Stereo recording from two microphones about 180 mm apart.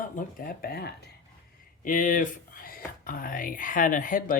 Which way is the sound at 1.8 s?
45° left (ahead or behind).